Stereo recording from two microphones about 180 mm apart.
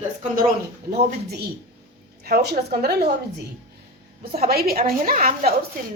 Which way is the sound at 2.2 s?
60° right (ahead or behind).